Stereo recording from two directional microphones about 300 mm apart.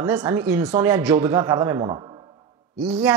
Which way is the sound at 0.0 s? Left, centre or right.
Centre.